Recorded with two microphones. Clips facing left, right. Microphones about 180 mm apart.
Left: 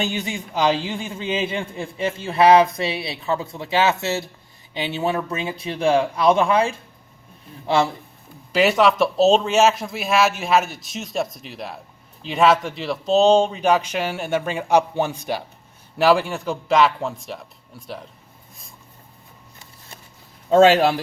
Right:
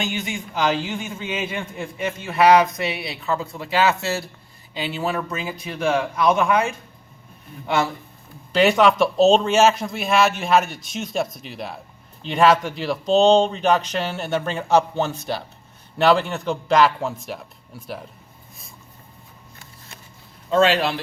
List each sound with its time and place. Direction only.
0.0 s a man's voice: 35° left (ahead or behind)
8.5 s a man's voice: 5° left (ahead or behind)
20.5 s speech: 45° left (ahead or behind)